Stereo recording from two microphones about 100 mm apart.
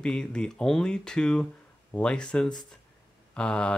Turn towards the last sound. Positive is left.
turn(degrees=10)  # may be behind; listen again after turning